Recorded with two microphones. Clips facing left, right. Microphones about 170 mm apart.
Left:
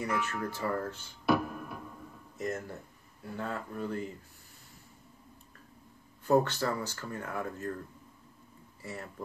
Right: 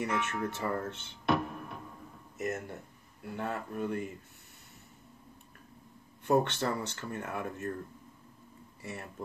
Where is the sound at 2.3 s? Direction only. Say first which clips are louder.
Even; 25° right (ahead or behind).